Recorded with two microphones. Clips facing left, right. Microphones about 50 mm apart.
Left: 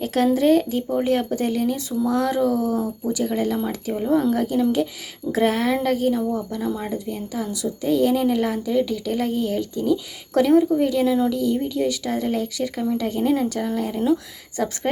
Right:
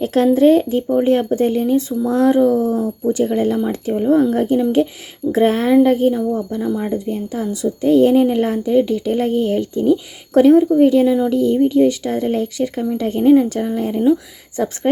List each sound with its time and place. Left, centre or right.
0.0 s speech: right
6.7 s speech: centre
6.9 s speech: right; by 10.8 s centre
10.8 s speech: right
11.0 s speech: centre
11.3 s speech: right
13.6 s speech: centre